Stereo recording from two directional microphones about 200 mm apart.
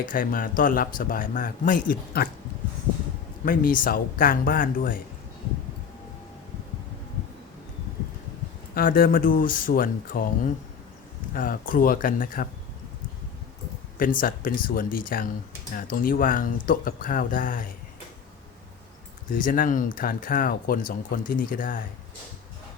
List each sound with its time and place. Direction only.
0.0 s speech: 45° left (ahead or behind)
3.4 s speech: 45° left (ahead or behind)
8.7 s speech: 45° left (ahead or behind)
14.0 s speech: 45° left (ahead or behind)
19.3 s speech: 45° left (ahead or behind)